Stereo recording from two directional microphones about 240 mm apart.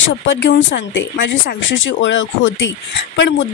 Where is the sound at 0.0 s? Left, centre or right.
Left.